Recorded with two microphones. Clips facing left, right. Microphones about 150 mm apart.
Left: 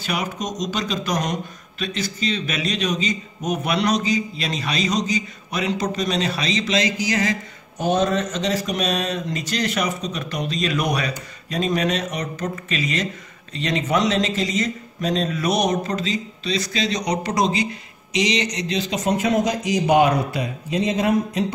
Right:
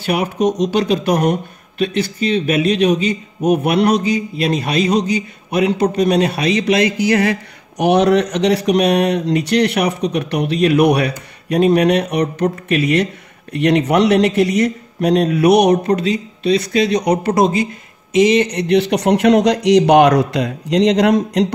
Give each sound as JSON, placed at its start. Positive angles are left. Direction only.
{"t": 0.0, "sound": "speech", "side_deg": -60}